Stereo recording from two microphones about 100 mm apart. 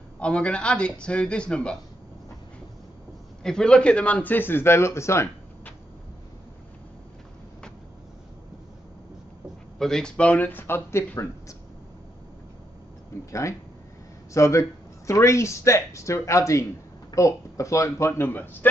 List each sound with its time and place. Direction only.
0.2 s speech: 10° left (ahead or behind)
3.4 s speech: 5° left (ahead or behind); by 5.3 s 30° left (ahead or behind)
9.8 s speech: 5° left (ahead or behind); by 11.5 s 30° left (ahead or behind)
13.2 s speech: 30° left (ahead or behind)